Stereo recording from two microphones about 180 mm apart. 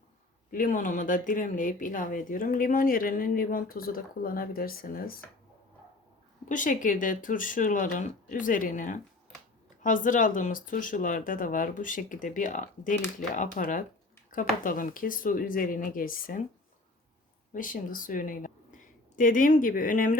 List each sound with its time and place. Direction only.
0.5 s speech: 50° left (ahead or behind)
6.5 s speech: 45° left (ahead or behind)
17.5 s speech: 50° left (ahead or behind)